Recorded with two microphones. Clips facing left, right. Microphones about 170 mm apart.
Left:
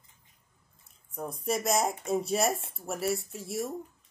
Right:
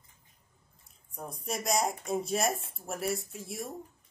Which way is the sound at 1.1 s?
Centre (ahead or behind).